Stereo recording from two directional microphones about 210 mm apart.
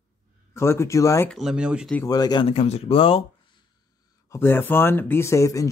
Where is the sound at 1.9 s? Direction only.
15° left (ahead or behind).